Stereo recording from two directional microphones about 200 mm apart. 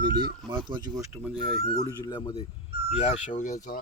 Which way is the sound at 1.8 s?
20° left (ahead or behind).